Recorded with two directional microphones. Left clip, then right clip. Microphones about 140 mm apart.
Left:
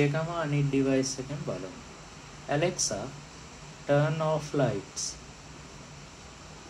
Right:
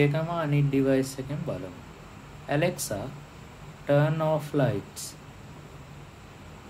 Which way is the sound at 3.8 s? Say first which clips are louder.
Right 2 dB; 20° right (ahead or behind).